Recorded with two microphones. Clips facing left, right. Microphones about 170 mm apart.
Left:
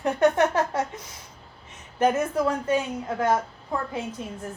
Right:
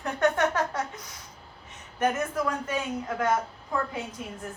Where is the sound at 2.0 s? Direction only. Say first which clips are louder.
Left 5 dB; 30° left (ahead or behind).